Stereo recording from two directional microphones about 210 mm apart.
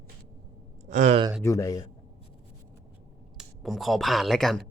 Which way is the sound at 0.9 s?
35° right (ahead or behind).